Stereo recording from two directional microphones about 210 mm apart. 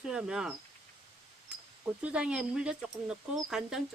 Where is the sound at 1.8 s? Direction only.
5° right (ahead or behind).